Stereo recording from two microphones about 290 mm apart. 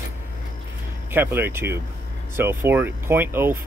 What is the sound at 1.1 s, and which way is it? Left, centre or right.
Speech, centre.